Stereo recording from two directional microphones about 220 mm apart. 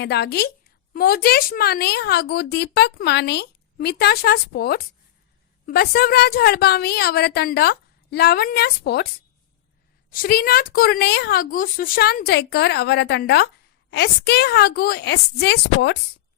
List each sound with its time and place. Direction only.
0.0 s speech: 50° left (ahead or behind)
10.1 s speech: 40° left (ahead or behind)